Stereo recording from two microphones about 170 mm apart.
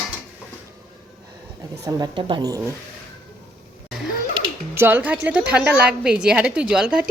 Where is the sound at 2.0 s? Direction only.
30° right (ahead or behind).